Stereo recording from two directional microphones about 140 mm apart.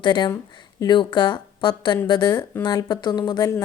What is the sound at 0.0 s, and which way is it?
A woman's voice, 30° left (ahead or behind).